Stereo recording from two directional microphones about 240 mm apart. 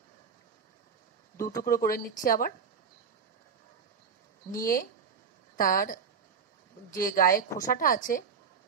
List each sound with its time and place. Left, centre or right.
1.6 s speech: left
4.5 s speech: left